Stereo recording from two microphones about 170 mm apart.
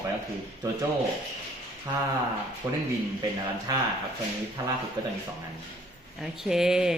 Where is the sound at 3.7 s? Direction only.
20° right (ahead or behind).